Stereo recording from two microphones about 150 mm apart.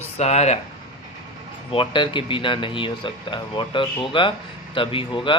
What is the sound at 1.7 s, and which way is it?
A man's voice, 35° left (ahead or behind).